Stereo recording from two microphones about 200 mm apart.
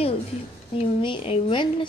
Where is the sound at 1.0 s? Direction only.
25° left (ahead or behind).